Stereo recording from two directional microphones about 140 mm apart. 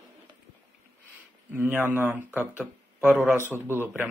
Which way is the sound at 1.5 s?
15° right (ahead or behind).